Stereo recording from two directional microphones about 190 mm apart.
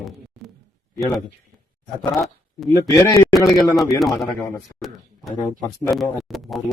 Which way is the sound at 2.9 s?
20° left (ahead or behind).